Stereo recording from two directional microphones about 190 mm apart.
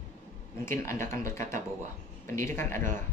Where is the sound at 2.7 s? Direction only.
45° right (ahead or behind).